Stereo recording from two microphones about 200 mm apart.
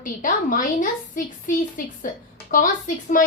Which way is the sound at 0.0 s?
40° left (ahead or behind).